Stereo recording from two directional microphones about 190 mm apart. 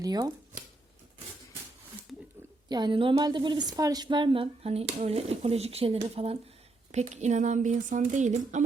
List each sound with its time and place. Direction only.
0.0 s a woman's voice: 20° right (ahead or behind)
2.1 s a sound: centre (ahead or behind)
2.6 s a woman's voice: 25° right (ahead or behind); by 8.6 s 40° right (ahead or behind)